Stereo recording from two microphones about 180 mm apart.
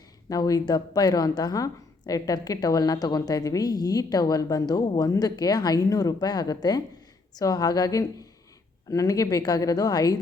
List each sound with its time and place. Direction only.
0.3 s a woman's voice: 20° left (ahead or behind)